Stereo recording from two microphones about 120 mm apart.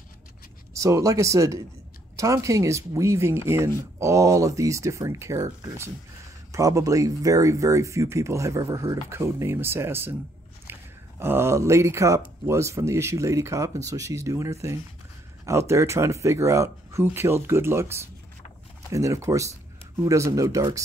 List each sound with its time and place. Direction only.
0.7 s speech: 25° right (ahead or behind)